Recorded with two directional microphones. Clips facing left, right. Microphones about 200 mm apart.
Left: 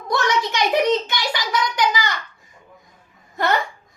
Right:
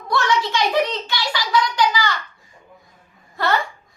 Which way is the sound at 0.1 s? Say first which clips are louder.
Right 1 dB; 20° left (ahead or behind).